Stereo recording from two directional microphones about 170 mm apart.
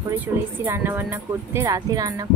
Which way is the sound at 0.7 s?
15° right (ahead or behind).